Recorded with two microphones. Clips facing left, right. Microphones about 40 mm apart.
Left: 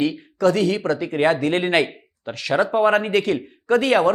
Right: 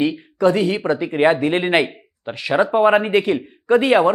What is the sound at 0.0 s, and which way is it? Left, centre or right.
Speech, right.